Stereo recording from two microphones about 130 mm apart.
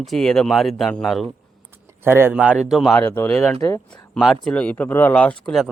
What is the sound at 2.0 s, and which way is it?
Speech, 15° right (ahead or behind).